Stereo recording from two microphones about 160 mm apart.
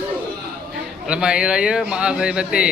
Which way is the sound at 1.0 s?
5° right (ahead or behind).